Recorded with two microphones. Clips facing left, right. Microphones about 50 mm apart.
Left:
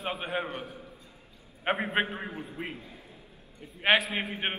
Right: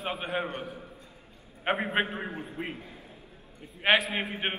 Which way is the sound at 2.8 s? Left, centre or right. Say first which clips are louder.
Right 2 dB; right.